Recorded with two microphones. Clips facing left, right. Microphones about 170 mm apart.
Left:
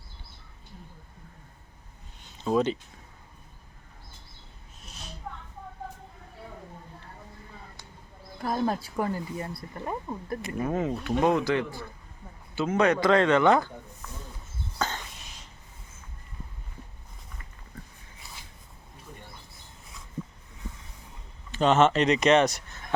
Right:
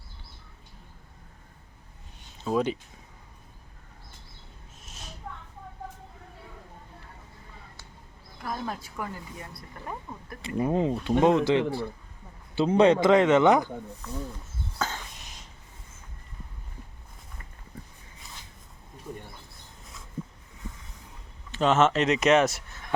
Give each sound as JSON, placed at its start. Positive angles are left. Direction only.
{"t": 2.4, "sound": "speech", "side_deg": -5}
{"t": 8.4, "sound": "speech", "side_deg": 35}
{"t": 10.6, "sound": "speech", "side_deg": -20}
{"t": 14.8, "sound": "a sound", "side_deg": -5}
{"t": 21.5, "sound": "speech", "side_deg": 0}